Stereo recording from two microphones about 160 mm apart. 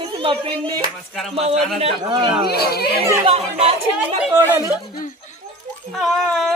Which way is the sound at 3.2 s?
40° right (ahead or behind).